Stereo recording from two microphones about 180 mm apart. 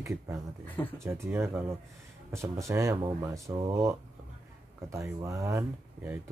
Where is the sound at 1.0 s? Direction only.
15° right (ahead or behind).